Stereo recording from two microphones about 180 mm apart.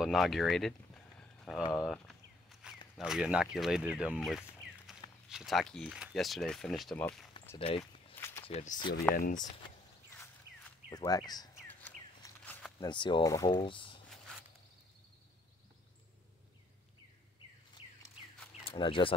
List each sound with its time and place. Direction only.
0.0 s a sound: centre (ahead or behind)
1.6 s speech: 20° left (ahead or behind)
1.9 s walk: centre (ahead or behind)
3.0 s speech: 5° right (ahead or behind)
4.0 s a sound: 5° right (ahead or behind)
5.3 s speech: centre (ahead or behind)
7.5 s walk: 30° left (ahead or behind)
8.5 s speech: 35° left (ahead or behind)
9.1 s speech: 50° left (ahead or behind)
10.9 s speech: 20° left (ahead or behind)
11.6 s a sound: 10° left (ahead or behind)
12.8 s speech: 25° left (ahead or behind)
18.6 s speech: 30° left (ahead or behind)